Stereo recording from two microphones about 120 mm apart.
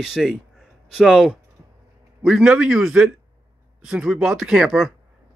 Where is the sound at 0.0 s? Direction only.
5° right (ahead or behind).